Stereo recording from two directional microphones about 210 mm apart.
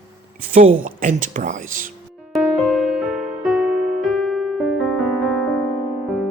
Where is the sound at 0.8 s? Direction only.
40° right (ahead or behind).